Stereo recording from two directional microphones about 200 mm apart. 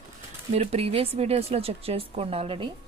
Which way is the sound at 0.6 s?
30° right (ahead or behind).